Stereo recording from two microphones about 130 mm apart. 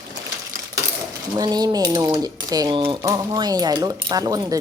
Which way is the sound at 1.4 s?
30° right (ahead or behind).